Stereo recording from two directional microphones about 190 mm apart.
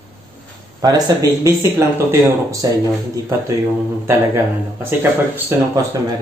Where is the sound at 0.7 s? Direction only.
20° right (ahead or behind).